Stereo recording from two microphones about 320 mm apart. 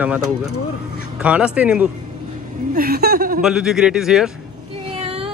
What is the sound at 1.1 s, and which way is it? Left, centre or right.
Speech, centre.